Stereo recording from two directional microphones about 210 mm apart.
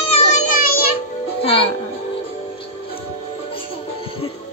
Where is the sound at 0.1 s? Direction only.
35° left (ahead or behind).